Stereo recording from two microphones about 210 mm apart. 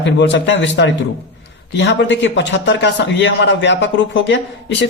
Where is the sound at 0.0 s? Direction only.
55° left (ahead or behind).